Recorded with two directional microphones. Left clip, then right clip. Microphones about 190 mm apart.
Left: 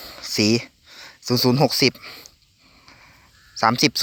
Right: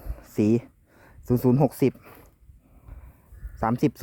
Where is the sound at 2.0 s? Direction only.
5° right (ahead or behind).